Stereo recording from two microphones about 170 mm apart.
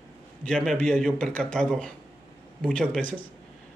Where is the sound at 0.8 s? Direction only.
5° left (ahead or behind).